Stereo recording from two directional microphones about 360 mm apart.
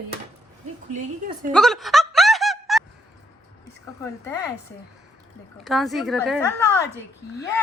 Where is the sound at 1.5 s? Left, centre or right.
Centre.